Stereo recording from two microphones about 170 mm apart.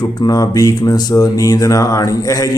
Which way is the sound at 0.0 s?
25° left (ahead or behind).